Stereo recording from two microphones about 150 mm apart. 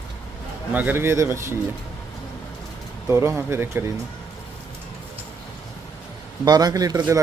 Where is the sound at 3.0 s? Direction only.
15° right (ahead or behind).